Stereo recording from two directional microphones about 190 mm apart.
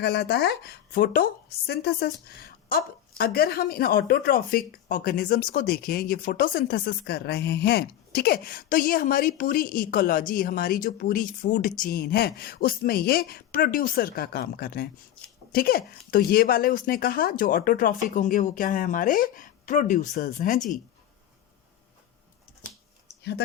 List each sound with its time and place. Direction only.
0.0 s a woman's voice: 55° left (ahead or behind)